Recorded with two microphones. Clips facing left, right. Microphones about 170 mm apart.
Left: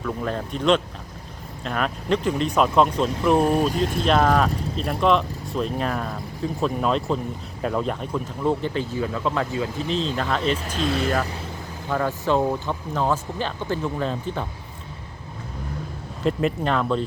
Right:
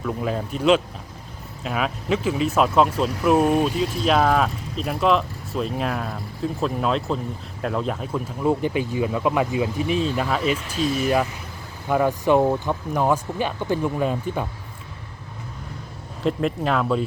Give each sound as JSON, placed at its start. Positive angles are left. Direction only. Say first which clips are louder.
{"t": 0.0, "sound": "speech", "louder": "right 1 dB", "side_deg": -5}
{"t": 10.8, "sound": "speech", "louder": "right 1 dB", "side_deg": 65}
{"t": 11.9, "sound": "speech", "louder": "right 4 dB", "side_deg": -15}
{"t": 16.2, "sound": "speech", "louder": "even", "side_deg": 0}